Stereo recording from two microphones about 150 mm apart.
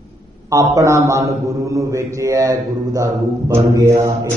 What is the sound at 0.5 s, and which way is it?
Mantra, 20° right (ahead or behind).